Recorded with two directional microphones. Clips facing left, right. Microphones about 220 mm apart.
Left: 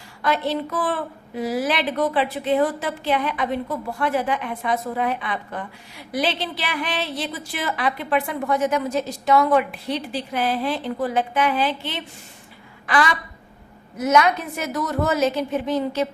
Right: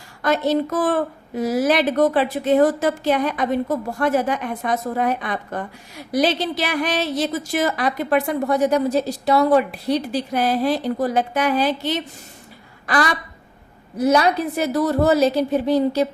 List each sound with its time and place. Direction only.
0.2 s a woman's voice: 45° right (ahead or behind)